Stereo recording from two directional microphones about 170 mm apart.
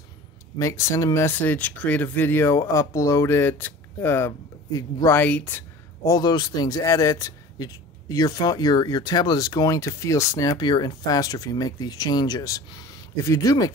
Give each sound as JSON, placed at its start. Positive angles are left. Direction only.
{"t": 0.6, "sound": "speech", "side_deg": 20}
{"t": 6.0, "sound": "speech", "side_deg": 25}